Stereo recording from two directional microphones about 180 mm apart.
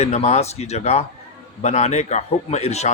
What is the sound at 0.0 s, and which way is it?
A man's voice, 35° left (ahead or behind).